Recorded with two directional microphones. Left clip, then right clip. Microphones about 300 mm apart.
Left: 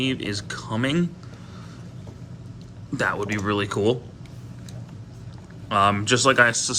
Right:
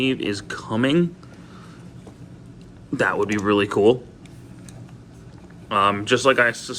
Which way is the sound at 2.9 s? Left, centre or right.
Centre.